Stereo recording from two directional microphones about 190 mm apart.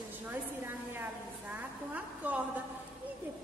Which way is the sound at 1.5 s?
10° right (ahead or behind).